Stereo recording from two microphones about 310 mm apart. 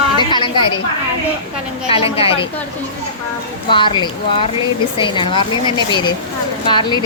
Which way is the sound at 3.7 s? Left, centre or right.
Centre.